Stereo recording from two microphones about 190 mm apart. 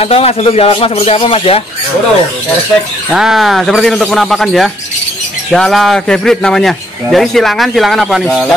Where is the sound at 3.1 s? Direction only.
5° right (ahead or behind).